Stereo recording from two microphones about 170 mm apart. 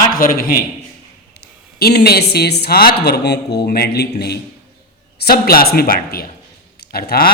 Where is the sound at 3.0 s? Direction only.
80° left.